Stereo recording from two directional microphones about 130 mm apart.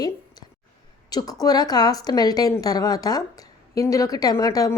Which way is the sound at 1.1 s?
30° left (ahead or behind).